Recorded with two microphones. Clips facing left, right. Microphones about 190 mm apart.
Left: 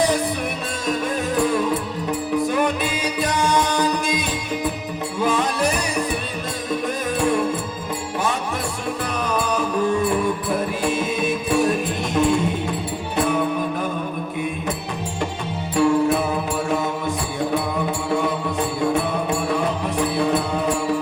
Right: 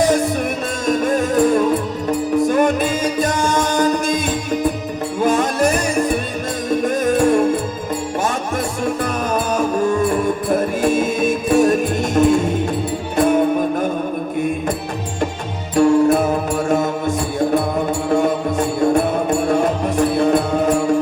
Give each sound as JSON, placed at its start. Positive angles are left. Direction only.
{"t": 0.0, "sound": "music", "side_deg": -45}
{"t": 9.2, "sound": "music", "side_deg": -45}
{"t": 15.7, "sound": "music", "side_deg": -45}